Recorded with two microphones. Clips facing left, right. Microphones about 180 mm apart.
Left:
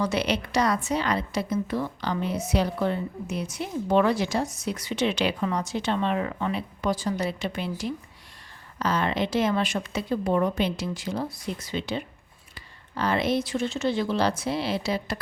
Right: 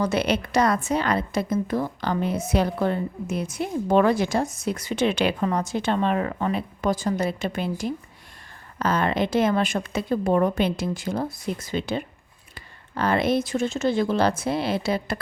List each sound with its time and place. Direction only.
0.0 s a woman's voice: 50° right (ahead or behind)